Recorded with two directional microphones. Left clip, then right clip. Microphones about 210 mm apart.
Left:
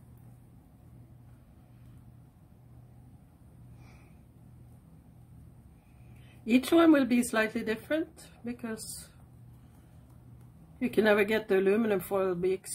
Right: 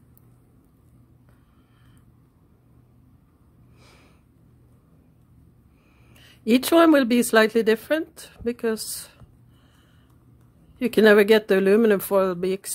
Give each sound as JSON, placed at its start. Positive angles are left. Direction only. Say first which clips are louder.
{"t": 6.4, "sound": "speech", "louder": "right 7 dB", "side_deg": -45}
{"t": 10.8, "sound": "speech", "louder": "right 9 dB", "side_deg": -50}